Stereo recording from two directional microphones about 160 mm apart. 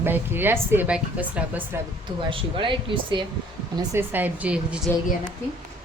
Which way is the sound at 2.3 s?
30° right (ahead or behind).